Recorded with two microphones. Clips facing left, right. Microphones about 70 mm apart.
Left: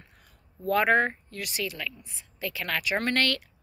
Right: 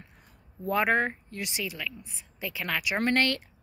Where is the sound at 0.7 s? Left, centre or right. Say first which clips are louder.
Left 3 dB; centre.